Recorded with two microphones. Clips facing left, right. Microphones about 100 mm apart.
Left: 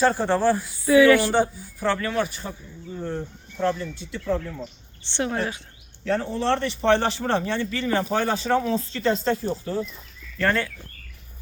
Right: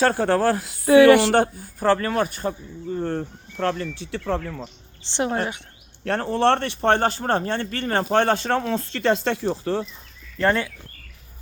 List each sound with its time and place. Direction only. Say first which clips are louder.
0.2 s speech: right 1 dB; 65° right (ahead or behind)
5.1 s speech: right 2 dB; 30° right (ahead or behind)
6.1 s speech: right 3 dB; 65° right (ahead or behind); by 9.8 s 85° right
10.3 s speech: right 2 dB; 25° right (ahead or behind)